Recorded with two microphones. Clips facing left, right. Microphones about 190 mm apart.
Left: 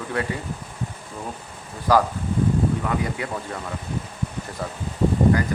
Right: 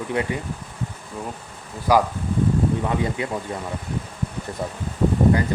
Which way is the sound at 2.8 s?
25° right (ahead or behind).